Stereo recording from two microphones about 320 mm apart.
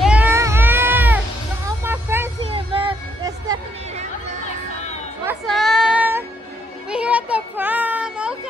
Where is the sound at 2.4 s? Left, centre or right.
Centre.